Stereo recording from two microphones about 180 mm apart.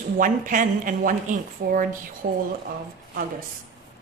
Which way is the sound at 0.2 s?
45° right (ahead or behind).